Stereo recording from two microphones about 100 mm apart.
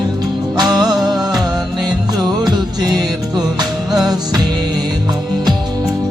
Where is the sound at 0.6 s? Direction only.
45° right (ahead or behind).